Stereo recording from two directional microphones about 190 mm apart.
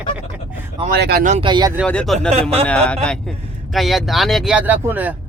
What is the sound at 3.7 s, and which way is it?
Speech, centre (ahead or behind).